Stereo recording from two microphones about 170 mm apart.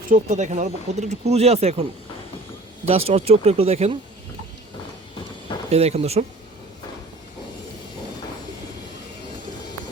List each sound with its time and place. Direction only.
0.1 s speech: 45° right (ahead or behind)
2.8 s speech: 35° right (ahead or behind)
5.7 s speech: 40° right (ahead or behind)